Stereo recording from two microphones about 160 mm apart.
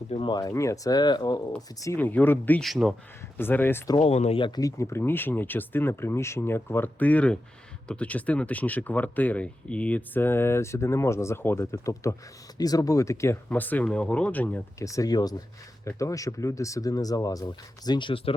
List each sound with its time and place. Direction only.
0.1 s speech: 30° left (ahead or behind)
1.8 s speech: 15° left (ahead or behind)
3.9 s speech: 40° left (ahead or behind)